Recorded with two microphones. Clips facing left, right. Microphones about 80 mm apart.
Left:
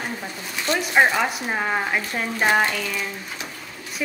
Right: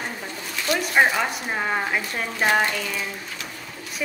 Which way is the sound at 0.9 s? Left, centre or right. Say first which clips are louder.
Left 2 dB; centre.